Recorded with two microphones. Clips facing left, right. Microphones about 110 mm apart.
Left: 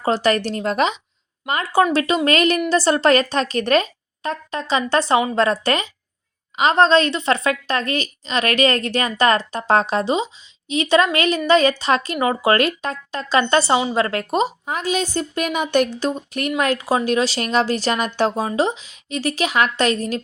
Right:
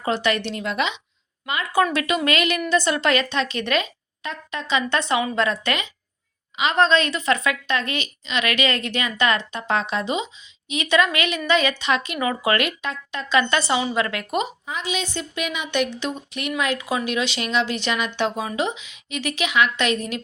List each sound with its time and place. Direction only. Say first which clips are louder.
0.0 s a woman's voice: left 4 dB; 35° left (ahead or behind)
14.7 s a woman's voice: left 6 dB; 45° left (ahead or behind)